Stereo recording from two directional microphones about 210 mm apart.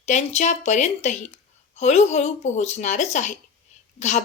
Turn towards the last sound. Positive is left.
turn(degrees=35)  # may be behind; listen again after turning